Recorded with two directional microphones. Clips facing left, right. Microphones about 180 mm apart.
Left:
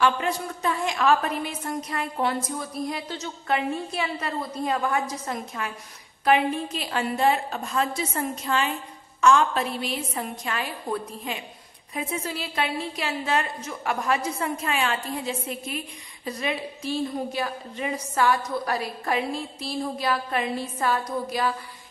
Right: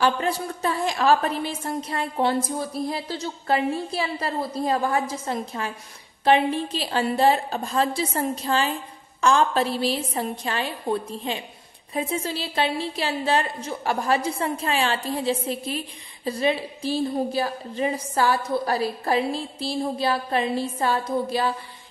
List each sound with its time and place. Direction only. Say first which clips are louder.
0.0 s a woman's voice: right 1 dB; 35° right (ahead or behind)